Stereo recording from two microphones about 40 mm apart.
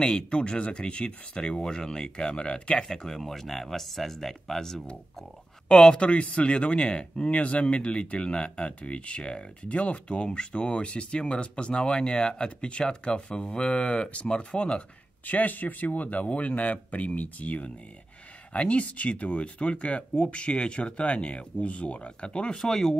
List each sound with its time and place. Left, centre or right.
0.0 s speech: left
2.9 s speech: centre
5.7 s speech: centre
5.9 s speech: left
15.2 s speech: left; by 22.9 s centre